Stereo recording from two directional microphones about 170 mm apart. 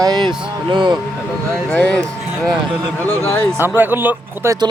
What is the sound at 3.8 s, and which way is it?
Speech, 10° right (ahead or behind).